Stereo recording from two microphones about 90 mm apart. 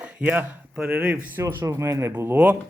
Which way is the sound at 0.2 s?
15° right (ahead or behind).